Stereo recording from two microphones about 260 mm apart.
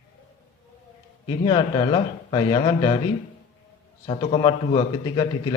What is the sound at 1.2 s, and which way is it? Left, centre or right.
A man's voice, centre.